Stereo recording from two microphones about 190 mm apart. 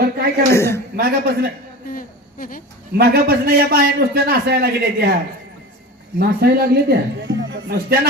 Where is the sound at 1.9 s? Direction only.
45° left (ahead or behind).